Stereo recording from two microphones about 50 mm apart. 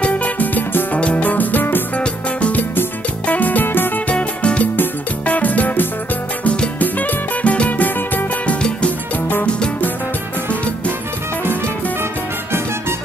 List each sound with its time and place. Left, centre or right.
0.0 s music: left
2.0 s music: left
3.3 s music: left
4.1 s music: left
6.4 s music: centre
6.8 s music: left